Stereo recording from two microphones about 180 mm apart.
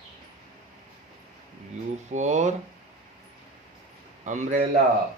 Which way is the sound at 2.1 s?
40° right (ahead or behind).